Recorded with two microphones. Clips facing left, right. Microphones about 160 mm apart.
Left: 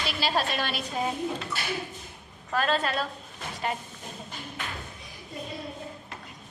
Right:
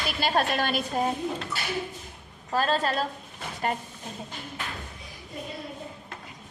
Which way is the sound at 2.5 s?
35° right (ahead or behind).